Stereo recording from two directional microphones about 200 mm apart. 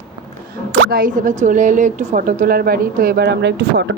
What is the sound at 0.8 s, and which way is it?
A woman's voice, 45° right (ahead or behind).